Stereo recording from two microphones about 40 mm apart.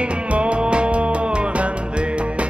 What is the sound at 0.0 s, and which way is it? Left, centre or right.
Music, right.